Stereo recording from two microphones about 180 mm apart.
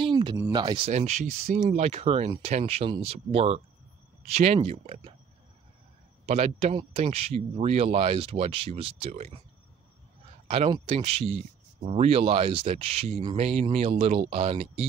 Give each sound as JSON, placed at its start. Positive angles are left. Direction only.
{"t": 0.0, "sound": "a sound", "side_deg": -25}
{"t": 0.5, "sound": "speech", "side_deg": -25}
{"t": 0.8, "sound": "a man's voice", "side_deg": -40}
{"t": 6.2, "sound": "a man's voice", "side_deg": -35}
{"t": 10.5, "sound": "a man's voice", "side_deg": -30}